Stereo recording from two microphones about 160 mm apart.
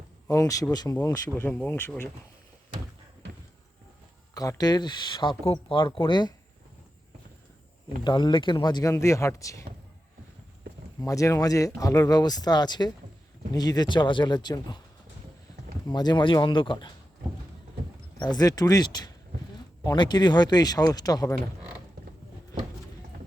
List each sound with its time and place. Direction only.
0.3 s speech: 20° left (ahead or behind)
1.5 s speech: 10° left (ahead or behind)
4.4 s speech: 25° left (ahead or behind)
8.0 s speech: 25° left (ahead or behind)
11.0 s speech: 20° left (ahead or behind)
15.9 s speech: 25° left (ahead or behind)
18.2 s speech: 25° left (ahead or behind)